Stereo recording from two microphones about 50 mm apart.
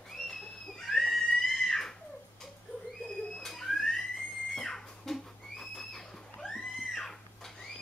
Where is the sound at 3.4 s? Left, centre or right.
Centre.